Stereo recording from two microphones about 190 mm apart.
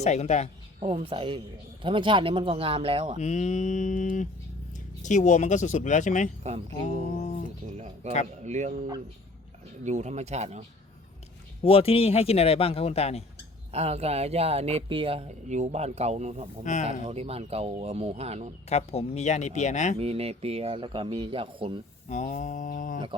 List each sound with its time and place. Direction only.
0.0 s a man's voice: 35° left (ahead or behind)
0.8 s speech: 35° right (ahead or behind)
3.2 s a man's voice: 40° left (ahead or behind)
7.8 s speech: 35° right (ahead or behind)
9.8 s speech: 40° right (ahead or behind)
11.6 s a man's voice: 30° left (ahead or behind)
13.7 s speech: 35° right (ahead or behind)
16.7 s a man's voice: 40° left (ahead or behind)
17.0 s speech: 35° right (ahead or behind)
18.7 s a man's voice: 35° left (ahead or behind)
20.0 s speech: 30° right (ahead or behind)
22.1 s a man's voice: 40° left (ahead or behind)